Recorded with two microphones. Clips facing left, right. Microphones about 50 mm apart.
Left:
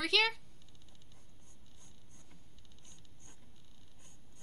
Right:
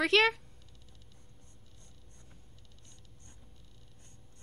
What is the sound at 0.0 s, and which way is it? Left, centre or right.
Speech, right.